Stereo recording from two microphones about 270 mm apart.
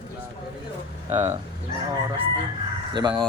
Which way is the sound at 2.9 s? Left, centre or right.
Centre.